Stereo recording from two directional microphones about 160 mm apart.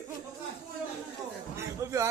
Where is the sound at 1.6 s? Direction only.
20° right (ahead or behind).